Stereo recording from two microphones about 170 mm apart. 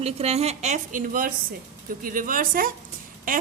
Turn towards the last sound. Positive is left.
turn(degrees=-55)  # may be behind; listen again after turning